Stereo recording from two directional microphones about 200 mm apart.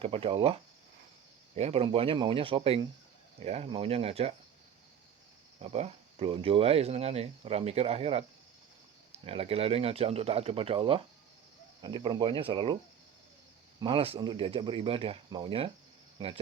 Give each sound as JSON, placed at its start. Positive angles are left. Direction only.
{"t": 0.0, "sound": "speech", "side_deg": -30}
{"t": 1.5, "sound": "speech", "side_deg": -30}
{"t": 5.6, "sound": "speech", "side_deg": -30}
{"t": 9.2, "sound": "speech", "side_deg": -30}
{"t": 13.7, "sound": "speech", "side_deg": -25}